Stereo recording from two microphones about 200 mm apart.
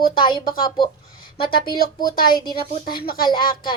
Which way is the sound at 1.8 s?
45° left (ahead or behind).